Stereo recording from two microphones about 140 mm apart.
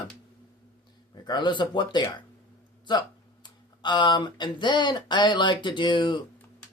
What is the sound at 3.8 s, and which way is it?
Speech, 35° left (ahead or behind).